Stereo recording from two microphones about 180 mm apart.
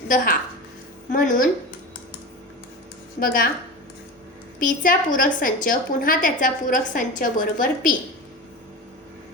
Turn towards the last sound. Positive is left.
turn(degrees=50)  # may be behind; listen again after turning